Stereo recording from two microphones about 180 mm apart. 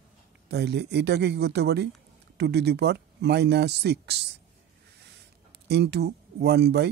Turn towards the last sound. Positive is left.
turn(degrees=-65)  # may be behind; listen again after turning